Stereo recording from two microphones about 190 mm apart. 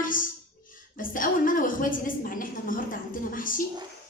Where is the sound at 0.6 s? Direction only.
45° left (ahead or behind).